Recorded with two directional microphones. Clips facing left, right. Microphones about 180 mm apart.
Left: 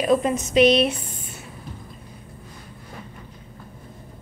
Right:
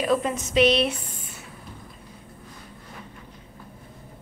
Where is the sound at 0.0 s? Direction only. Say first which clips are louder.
Left 4 dB; 20° left (ahead or behind).